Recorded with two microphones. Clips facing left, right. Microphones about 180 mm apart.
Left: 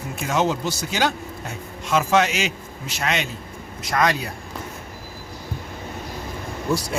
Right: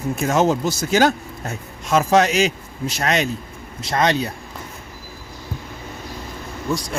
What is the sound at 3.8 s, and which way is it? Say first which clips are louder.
Speech: right 2 dB; 25° right (ahead or behind).